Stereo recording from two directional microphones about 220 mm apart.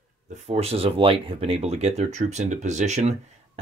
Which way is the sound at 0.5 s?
25° right (ahead or behind).